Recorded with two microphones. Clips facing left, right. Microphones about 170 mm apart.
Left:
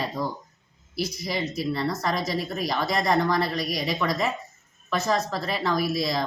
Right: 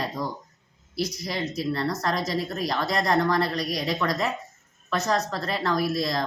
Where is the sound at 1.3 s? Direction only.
5° left (ahead or behind).